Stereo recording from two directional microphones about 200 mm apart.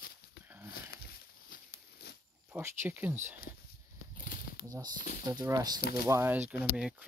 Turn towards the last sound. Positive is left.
turn(degrees=-5)  # may be behind; listen again after turning